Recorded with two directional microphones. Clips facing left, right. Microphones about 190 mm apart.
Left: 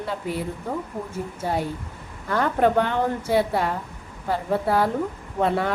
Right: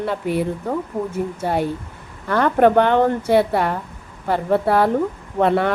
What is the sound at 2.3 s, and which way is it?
A woman's voice, 70° right (ahead or behind).